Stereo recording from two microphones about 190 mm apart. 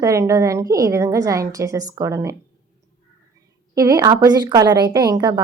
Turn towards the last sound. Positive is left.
turn(degrees=-20)  # may be behind; listen again after turning